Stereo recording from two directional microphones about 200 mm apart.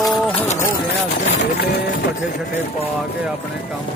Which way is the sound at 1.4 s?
55° left (ahead or behind).